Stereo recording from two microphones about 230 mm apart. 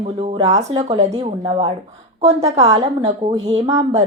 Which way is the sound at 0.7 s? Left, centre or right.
Centre.